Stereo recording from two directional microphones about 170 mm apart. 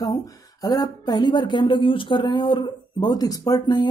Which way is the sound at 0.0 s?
20° left (ahead or behind).